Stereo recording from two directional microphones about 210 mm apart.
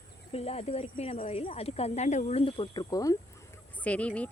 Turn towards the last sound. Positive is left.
turn(degrees=5)  # may be behind; listen again after turning